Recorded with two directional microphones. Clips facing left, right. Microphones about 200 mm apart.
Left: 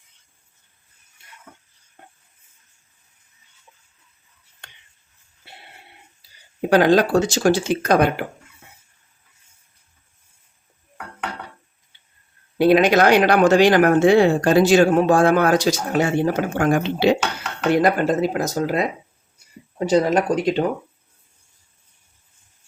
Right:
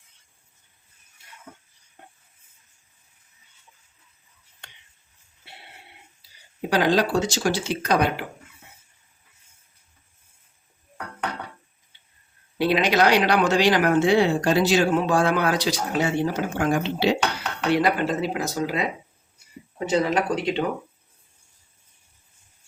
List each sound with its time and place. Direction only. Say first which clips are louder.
6.6 s speech: left 6 dB; 50° left (ahead or behind)
12.5 s speech: left 6 dB; 50° left (ahead or behind)
19.8 s speech: left 5 dB; 40° left (ahead or behind)